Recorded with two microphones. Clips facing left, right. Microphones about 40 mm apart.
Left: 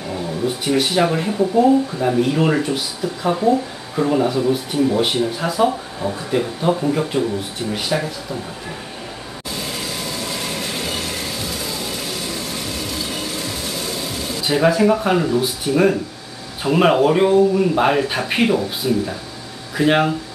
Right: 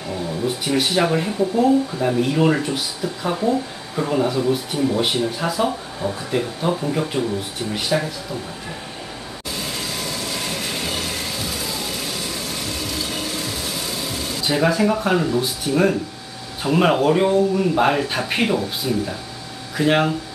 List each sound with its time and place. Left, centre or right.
0.1 s speech: centre
9.6 s train: centre
16.6 s speech: centre